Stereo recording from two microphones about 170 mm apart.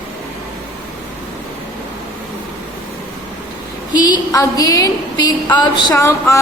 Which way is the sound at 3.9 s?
25° left (ahead or behind).